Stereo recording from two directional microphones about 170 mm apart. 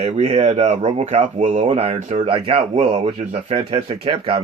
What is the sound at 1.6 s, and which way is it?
Speech, 35° right (ahead or behind).